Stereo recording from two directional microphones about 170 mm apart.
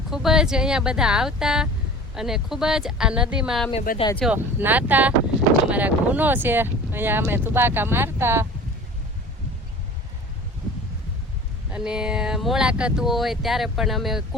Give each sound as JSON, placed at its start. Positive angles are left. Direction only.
{"t": 0.1, "sound": "speech", "side_deg": 0}
{"t": 3.9, "sound": "speech", "side_deg": 55}
{"t": 4.3, "sound": "speech", "side_deg": -10}
{"t": 11.7, "sound": "speech", "side_deg": -5}